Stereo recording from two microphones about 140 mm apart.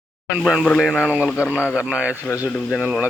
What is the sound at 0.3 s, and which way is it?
Speech, 5° right (ahead or behind).